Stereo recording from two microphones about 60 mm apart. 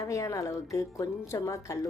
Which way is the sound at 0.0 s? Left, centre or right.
Left.